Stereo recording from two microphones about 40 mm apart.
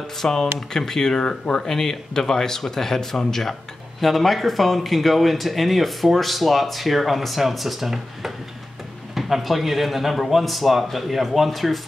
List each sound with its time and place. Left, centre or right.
0.2 s speech: centre
1.2 s speech: left
1.7 s speech: centre